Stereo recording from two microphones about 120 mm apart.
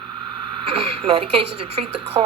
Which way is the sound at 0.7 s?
50° right (ahead or behind).